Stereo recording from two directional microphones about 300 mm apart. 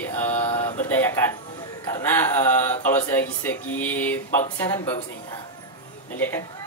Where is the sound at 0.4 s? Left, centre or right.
Centre.